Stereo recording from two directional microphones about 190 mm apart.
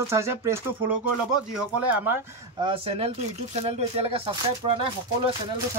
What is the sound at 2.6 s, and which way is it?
Speech, 30° right (ahead or behind).